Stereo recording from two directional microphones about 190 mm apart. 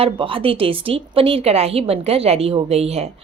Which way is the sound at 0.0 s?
25° right (ahead or behind).